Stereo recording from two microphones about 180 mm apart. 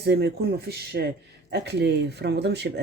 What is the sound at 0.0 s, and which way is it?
Speech, 65° right (ahead or behind).